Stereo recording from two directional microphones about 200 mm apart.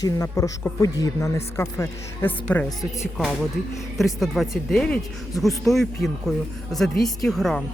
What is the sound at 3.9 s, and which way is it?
Speech, centre (ahead or behind).